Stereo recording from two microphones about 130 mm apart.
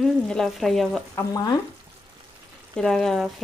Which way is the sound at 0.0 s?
5° left (ahead or behind).